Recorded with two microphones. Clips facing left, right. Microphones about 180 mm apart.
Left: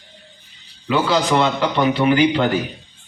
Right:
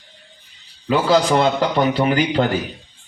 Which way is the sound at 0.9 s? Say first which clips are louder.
Right 2 dB; 40° right (ahead or behind).